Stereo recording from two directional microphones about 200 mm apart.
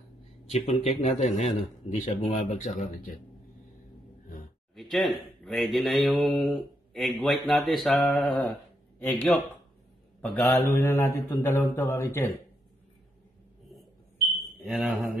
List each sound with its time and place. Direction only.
0.5 s a man's voice: 35° left (ahead or behind)
4.7 s speech: centre (ahead or behind)
9.0 s mantra: 5° left (ahead or behind)
14.6 s speech: 5° right (ahead or behind)